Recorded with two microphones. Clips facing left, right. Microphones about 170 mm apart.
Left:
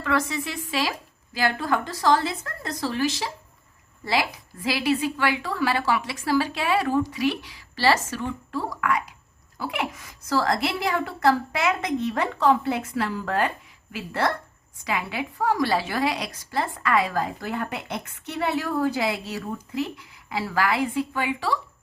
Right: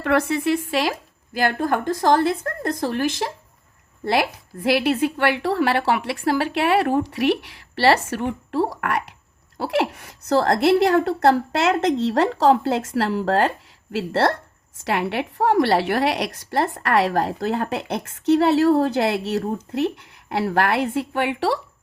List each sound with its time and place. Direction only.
0.0 s a woman's voice: 65° right (ahead or behind); by 13.5 s 90° right
13.9 s a woman's voice: 75° right (ahead or behind)
15.4 s a woman's voice: 65° right (ahead or behind)